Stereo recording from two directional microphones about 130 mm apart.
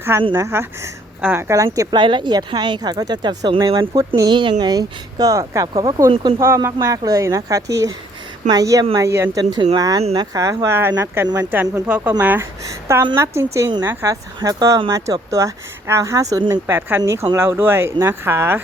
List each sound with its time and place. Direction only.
0.3 s a woman's voice: 20° right (ahead or behind)
1.9 s speech: 35° right (ahead or behind)
6.4 s a woman's voice: 20° right (ahead or behind)